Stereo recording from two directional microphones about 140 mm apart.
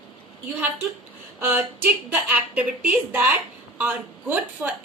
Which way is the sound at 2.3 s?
10° right (ahead or behind).